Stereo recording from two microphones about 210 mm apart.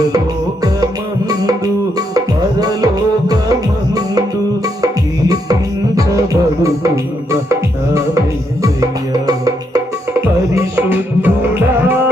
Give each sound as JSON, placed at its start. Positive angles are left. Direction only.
{"t": 1.3, "sound": "music", "side_deg": -15}
{"t": 6.0, "sound": "music", "side_deg": -15}
{"t": 8.6, "sound": "music", "side_deg": -15}